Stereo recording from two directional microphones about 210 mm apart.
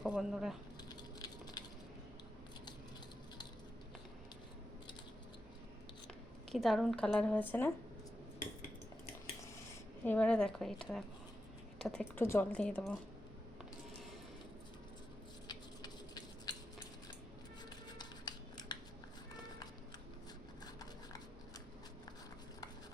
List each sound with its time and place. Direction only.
0.1 s speech: centre (ahead or behind)
0.9 s a sound: 20° left (ahead or behind)
6.5 s a woman's voice: centre (ahead or behind)
10.0 s a woman's voice: 5° left (ahead or behind)
15.4 s a sound: 20° left (ahead or behind)
17.9 s scissors: 20° left (ahead or behind)